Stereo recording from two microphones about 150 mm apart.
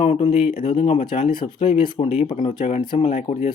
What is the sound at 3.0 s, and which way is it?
Speech, 55° left (ahead or behind).